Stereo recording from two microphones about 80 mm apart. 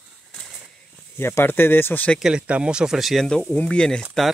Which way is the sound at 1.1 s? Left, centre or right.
Left.